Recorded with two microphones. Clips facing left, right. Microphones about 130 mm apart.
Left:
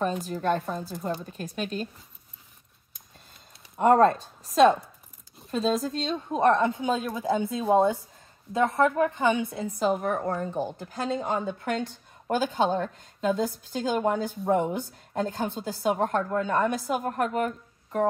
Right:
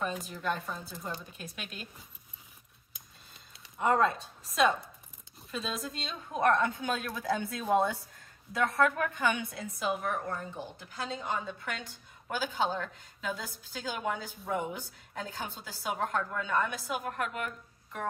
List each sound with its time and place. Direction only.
0.3 s a woman's voice: 40° left (ahead or behind)
3.7 s speech: 50° left (ahead or behind)
5.5 s a woman's voice: 40° left (ahead or behind)